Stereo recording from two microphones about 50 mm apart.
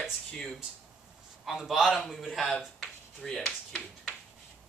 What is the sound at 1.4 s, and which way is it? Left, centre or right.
A man's voice, centre.